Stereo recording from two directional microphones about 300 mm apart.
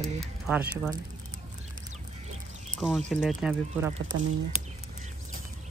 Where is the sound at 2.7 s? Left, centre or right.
Centre.